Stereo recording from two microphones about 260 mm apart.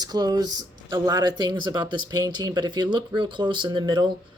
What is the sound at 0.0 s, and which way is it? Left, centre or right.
Speech, centre.